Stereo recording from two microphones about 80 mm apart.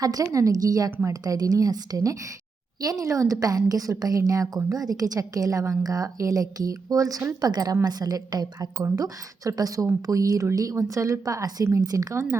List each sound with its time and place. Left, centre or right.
0.0 s a woman's voice: right